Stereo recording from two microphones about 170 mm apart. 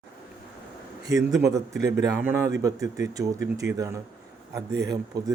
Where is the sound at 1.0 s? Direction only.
20° right (ahead or behind).